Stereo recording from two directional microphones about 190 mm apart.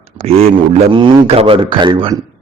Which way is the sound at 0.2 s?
35° right (ahead or behind).